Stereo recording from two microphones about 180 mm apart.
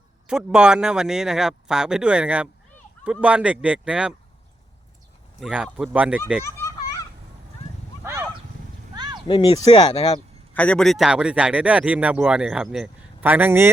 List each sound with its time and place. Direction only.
0.3 s speech: 5° right (ahead or behind)
5.4 s speech: centre (ahead or behind)
8.0 s a sound: 15° right (ahead or behind)
9.2 s speech: 25° left (ahead or behind)
10.5 s speech: 5° left (ahead or behind); by 13.7 s 10° right (ahead or behind)